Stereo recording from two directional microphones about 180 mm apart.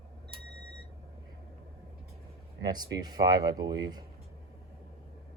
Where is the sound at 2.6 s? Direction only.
20° right (ahead or behind).